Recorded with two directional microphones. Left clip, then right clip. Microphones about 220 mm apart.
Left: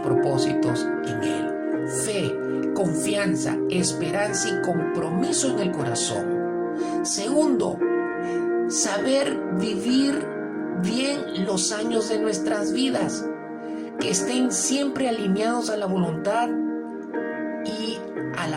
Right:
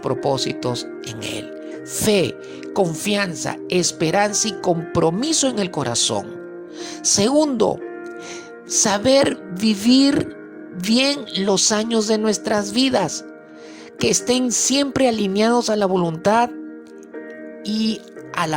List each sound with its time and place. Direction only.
0.0 s speech: 40° right (ahead or behind)
2.0 s speech: 45° right (ahead or behind)
8.8 s speech: 40° right (ahead or behind)